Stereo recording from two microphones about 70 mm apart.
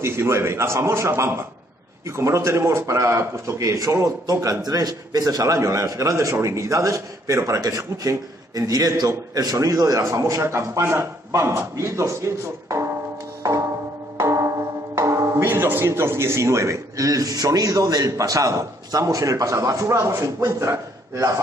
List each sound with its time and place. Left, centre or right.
0.0 s a man's voice: right
13.4 s music: right
14.1 s church bell: right
15.0 s a man's voice: right